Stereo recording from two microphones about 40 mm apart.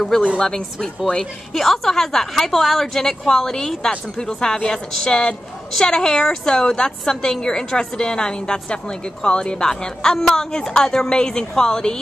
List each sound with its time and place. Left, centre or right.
0.4 s a woman's voice: centre